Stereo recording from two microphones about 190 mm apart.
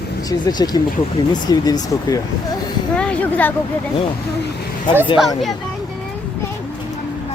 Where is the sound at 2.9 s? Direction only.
5° left (ahead or behind).